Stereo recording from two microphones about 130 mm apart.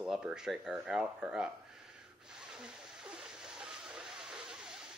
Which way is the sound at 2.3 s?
5° right (ahead or behind).